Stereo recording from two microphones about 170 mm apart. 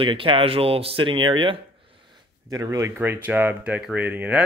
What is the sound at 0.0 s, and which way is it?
Speech, 30° right (ahead or behind).